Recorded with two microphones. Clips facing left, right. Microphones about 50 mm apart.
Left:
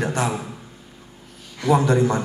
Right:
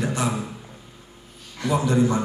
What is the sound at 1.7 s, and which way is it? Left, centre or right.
Speech, left.